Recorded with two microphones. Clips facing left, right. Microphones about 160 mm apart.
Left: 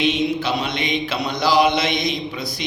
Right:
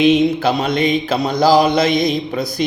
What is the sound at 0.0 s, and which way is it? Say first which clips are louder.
Mantra: right 7 dB; 50° right (ahead or behind).